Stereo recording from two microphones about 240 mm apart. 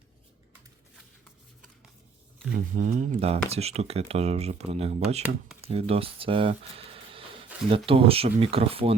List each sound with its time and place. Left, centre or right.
2.5 s speech: right